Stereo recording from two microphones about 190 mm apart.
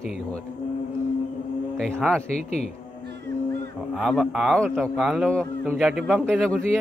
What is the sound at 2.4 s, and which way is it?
Speech, 35° left (ahead or behind).